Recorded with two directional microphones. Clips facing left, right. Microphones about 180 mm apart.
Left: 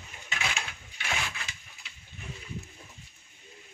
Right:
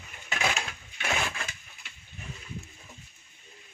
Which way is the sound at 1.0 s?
50° right (ahead or behind).